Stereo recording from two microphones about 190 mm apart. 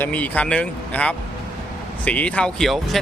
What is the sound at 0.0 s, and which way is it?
Speech, 5° left (ahead or behind).